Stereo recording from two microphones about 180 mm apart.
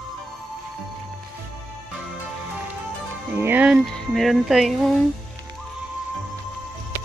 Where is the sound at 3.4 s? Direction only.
10° right (ahead or behind).